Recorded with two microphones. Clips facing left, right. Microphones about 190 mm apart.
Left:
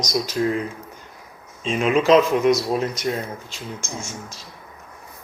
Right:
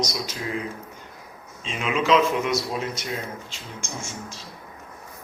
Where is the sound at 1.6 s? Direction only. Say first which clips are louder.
Left 6 dB; 45° left (ahead or behind).